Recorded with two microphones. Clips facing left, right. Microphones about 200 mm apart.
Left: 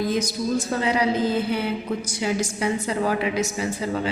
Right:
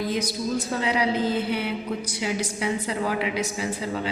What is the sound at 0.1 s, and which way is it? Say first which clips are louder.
A woman's voice: left 3 dB; 45° left (ahead or behind).